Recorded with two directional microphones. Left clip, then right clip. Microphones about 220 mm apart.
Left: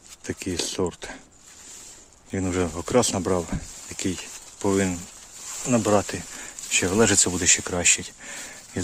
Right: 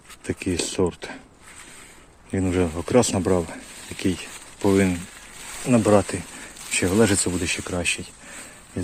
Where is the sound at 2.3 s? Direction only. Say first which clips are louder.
Right 3 dB; 10° left (ahead or behind).